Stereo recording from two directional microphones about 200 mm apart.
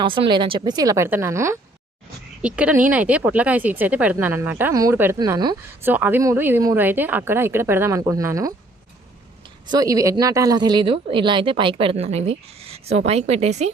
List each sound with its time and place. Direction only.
0.0 s speech: 25° right (ahead or behind)
2.6 s speech: 5° right (ahead or behind)
9.6 s a woman's voice: 20° right (ahead or behind); by 13.7 s 35° right (ahead or behind)